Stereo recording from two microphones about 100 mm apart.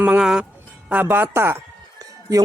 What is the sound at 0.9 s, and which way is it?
Speech, 20° right (ahead or behind).